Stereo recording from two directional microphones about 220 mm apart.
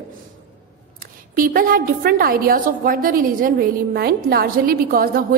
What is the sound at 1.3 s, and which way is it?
A woman's voice, 40° right (ahead or behind).